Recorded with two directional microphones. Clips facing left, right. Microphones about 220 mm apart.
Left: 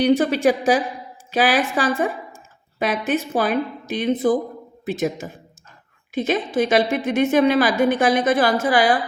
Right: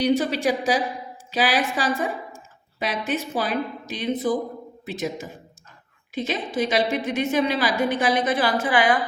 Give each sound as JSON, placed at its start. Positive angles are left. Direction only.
{"t": 0.0, "sound": "a woman's voice", "side_deg": 55}
{"t": 6.1, "sound": "a woman's voice", "side_deg": 50}